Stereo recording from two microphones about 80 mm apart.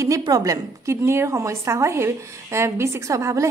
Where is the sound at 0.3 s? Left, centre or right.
Right.